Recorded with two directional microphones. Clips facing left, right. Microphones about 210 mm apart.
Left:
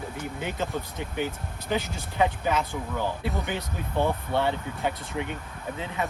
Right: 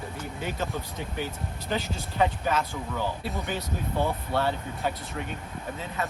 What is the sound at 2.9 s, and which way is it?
Speech, 15° left (ahead or behind).